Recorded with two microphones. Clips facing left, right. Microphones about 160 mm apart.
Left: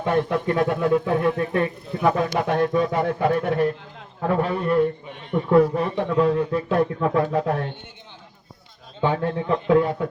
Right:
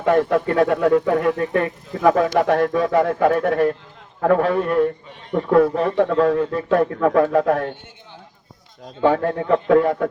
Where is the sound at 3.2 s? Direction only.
45° right (ahead or behind).